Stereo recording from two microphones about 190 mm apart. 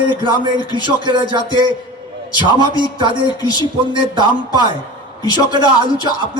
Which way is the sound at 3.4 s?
20° left (ahead or behind).